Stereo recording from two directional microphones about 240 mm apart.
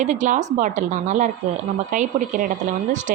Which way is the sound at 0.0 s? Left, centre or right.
Right.